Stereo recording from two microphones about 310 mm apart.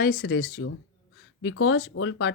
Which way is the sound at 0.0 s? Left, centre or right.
Left.